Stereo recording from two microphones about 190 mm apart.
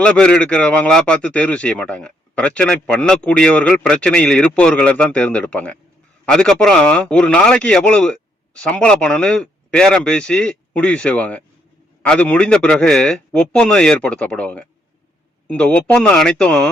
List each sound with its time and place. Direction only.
0.0 s a man's voice: 5° left (ahead or behind)